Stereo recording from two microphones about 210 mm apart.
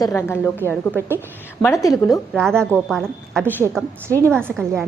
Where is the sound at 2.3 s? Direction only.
5° left (ahead or behind).